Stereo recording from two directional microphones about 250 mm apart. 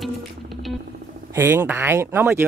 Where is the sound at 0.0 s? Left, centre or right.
Centre.